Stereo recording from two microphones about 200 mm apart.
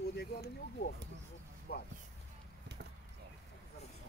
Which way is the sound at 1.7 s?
50° left (ahead or behind).